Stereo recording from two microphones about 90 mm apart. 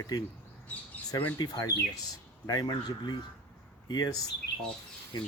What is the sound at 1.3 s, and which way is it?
Speech, 50° left (ahead or behind).